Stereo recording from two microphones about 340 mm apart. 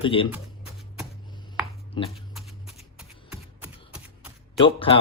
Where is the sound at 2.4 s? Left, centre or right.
Centre.